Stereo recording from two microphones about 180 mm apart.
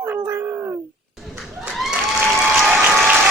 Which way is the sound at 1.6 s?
Centre (ahead or behind).